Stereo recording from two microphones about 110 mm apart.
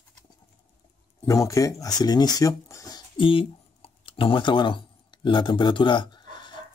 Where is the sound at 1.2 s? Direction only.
30° left (ahead or behind).